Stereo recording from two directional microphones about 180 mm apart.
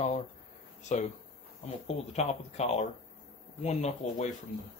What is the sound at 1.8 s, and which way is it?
Speech, 35° left (ahead or behind).